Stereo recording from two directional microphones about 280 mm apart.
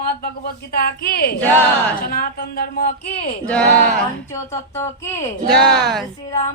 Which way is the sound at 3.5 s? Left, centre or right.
Centre.